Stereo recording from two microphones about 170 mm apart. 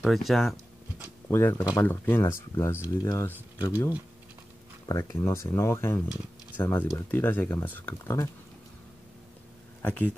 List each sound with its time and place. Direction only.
0.0 s a sound: centre (ahead or behind)
1.3 s speech: 15° left (ahead or behind)
9.8 s speech: 10° left (ahead or behind)